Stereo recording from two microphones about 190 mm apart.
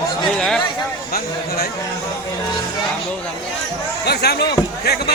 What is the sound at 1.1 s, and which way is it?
Speech, 55° left (ahead or behind).